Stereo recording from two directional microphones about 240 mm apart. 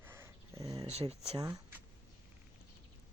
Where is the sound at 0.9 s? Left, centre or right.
Right.